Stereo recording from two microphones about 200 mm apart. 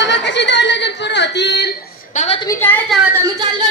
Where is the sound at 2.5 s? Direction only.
10° left (ahead or behind).